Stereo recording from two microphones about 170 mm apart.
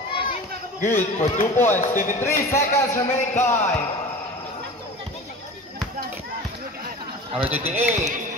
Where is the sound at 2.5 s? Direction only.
15° left (ahead or behind).